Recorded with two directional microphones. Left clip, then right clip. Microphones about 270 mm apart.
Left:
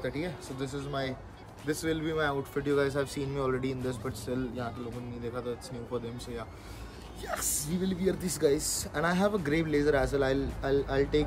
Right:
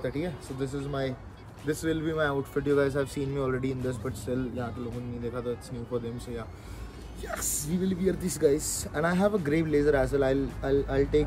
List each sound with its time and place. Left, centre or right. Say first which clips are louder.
0.0 s speech: right 2 dB; centre